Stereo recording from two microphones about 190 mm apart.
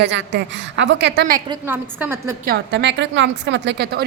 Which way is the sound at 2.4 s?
60° right (ahead or behind).